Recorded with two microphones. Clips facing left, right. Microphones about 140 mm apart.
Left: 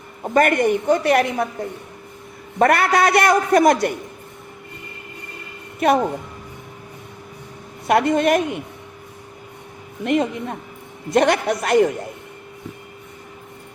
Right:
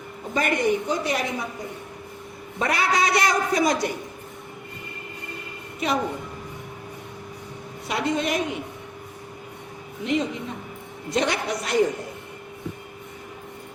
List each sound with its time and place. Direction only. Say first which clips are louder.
0.3 s a man's voice: left 6 dB; 55° left (ahead or behind)
2.6 s a man's voice: left 7 dB; 55° left (ahead or behind)
5.8 s a man's voice: left 9 dB; 55° left (ahead or behind)
7.9 s a man's voice: left 9 dB; 55° left (ahead or behind)
10.0 s a man's voice: left 5 dB; 55° left (ahead or behind)